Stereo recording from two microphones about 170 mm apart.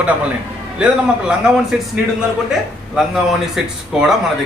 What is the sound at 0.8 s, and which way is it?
Speech, 5° right (ahead or behind).